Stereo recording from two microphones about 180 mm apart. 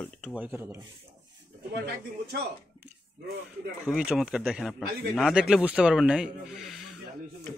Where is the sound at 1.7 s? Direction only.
65° right (ahead or behind).